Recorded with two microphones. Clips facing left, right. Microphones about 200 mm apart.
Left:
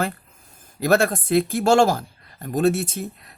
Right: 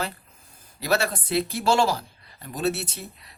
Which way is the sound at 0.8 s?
50° left (ahead or behind).